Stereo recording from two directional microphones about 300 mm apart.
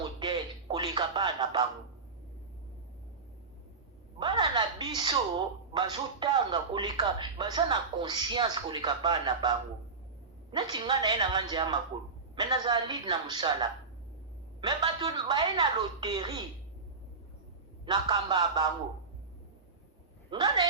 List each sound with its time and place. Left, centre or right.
0.2 s music: centre
4.2 s speech: centre
10.5 s speech: centre
17.8 s speech: centre
20.3 s speech: centre